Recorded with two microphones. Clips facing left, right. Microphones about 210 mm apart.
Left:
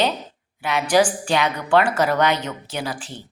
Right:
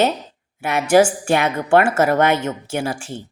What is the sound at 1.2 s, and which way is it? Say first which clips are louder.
Speech: right 3 dB; 50° right (ahead or behind).